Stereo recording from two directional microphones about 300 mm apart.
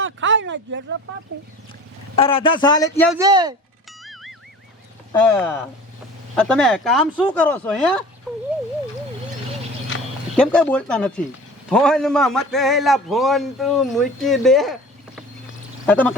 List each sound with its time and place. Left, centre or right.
0.0 s a sound: right
2.1 s speech: centre
3.2 s speech: centre
4.0 s music: centre
5.2 s a man's voice: centre
10.3 s a man's voice: centre